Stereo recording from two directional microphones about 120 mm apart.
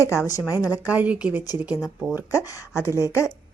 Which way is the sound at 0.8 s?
15° right (ahead or behind).